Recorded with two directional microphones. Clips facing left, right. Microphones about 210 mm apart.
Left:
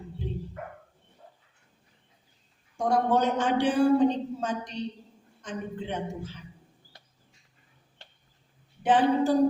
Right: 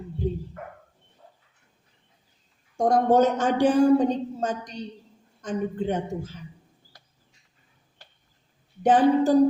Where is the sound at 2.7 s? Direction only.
45° right (ahead or behind).